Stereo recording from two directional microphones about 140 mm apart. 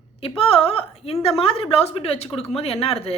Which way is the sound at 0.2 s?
45° left (ahead or behind).